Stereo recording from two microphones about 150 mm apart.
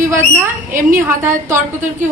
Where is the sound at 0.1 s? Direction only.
20° right (ahead or behind).